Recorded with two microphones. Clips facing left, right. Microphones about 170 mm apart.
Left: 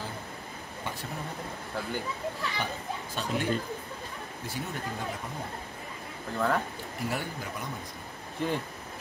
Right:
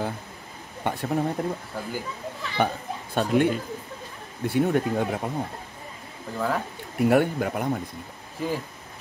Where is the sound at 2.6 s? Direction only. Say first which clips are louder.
Right 8 dB; 60° right (ahead or behind).